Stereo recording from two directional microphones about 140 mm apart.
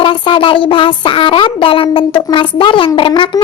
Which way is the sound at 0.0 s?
40° left (ahead or behind).